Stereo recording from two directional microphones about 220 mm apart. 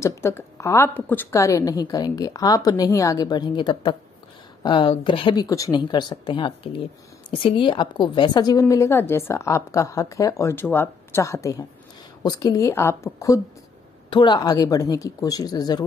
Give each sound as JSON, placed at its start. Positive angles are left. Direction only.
{"t": 0.0, "sound": "a woman's voice", "side_deg": 10}